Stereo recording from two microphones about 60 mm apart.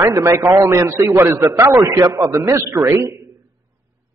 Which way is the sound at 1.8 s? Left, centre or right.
Right.